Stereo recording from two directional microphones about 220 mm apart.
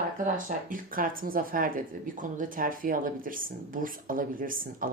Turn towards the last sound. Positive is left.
turn(degrees=-40)  # may be behind; listen again after turning